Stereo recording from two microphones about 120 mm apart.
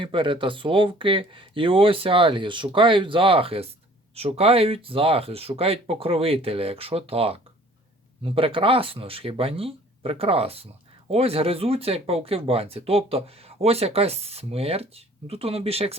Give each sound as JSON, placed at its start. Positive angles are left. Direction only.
{"t": 0.0, "sound": "speech", "side_deg": -45}